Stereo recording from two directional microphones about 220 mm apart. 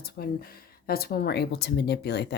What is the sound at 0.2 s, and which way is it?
Speech, 45° left (ahead or behind).